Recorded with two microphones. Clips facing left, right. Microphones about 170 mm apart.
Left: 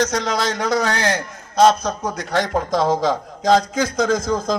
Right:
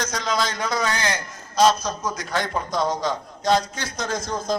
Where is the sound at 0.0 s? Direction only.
70° left (ahead or behind).